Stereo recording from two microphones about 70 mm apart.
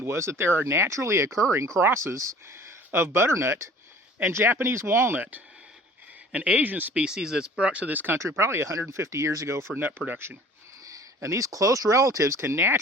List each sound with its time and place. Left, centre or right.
0.0 s speech: right
7.0 s speech: centre; by 8.2 s right
8.2 s speech: right
10.8 s speech: right